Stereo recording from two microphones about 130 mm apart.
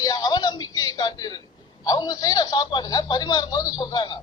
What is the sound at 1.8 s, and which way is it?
A man's voice, 30° left (ahead or behind).